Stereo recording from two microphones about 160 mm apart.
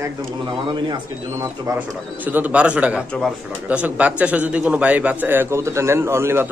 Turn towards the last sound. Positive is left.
turn(degrees=-15)  # may be behind; listen again after turning